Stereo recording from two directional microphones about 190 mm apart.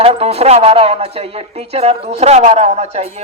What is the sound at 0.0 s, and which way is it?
Speech, 30° right (ahead or behind).